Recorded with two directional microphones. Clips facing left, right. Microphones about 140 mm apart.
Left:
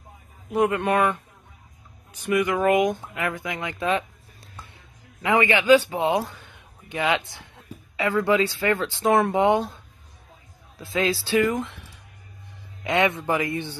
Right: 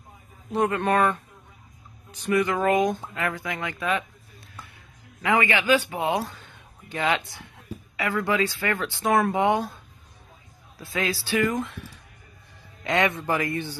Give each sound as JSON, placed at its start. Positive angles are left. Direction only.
{"t": 0.5, "sound": "speech", "side_deg": 15}
{"t": 2.2, "sound": "speech", "side_deg": 15}
{"t": 5.2, "sound": "a man's voice", "side_deg": 20}
{"t": 10.8, "sound": "speech", "side_deg": 25}